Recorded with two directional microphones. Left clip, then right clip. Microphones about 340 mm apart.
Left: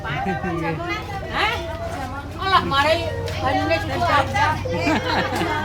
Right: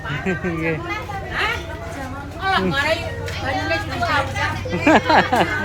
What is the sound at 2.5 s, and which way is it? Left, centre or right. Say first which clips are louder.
Speech: left 2 dB; left.